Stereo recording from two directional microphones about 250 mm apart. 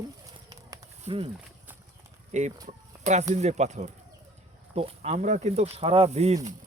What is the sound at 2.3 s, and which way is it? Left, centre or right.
Speech, right.